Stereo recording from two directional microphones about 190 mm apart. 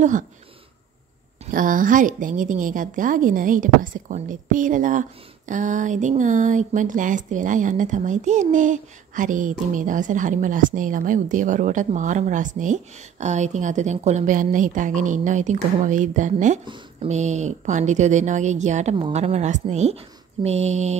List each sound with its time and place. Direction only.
1.4 s a woman's voice: 45° right (ahead or behind)
16.6 s speech: 25° right (ahead or behind)
17.1 s speech: 35° right (ahead or behind)